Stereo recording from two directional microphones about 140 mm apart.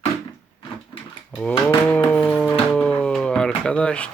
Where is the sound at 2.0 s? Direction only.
10° left (ahead or behind).